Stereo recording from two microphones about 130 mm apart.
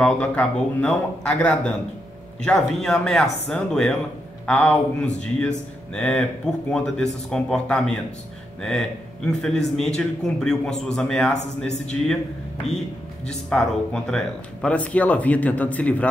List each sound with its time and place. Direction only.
0.0 s a man's voice: 10° left (ahead or behind)
12.7 s speech: 60° left (ahead or behind)
13.3 s speech: 5° left (ahead or behind)